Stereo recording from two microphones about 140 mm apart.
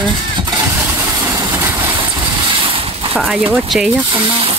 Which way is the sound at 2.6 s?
40° right (ahead or behind).